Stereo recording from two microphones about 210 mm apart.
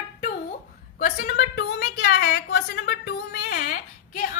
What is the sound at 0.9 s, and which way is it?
A woman's voice, 45° left (ahead or behind).